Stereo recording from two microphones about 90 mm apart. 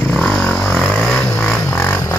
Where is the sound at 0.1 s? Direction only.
5° left (ahead or behind).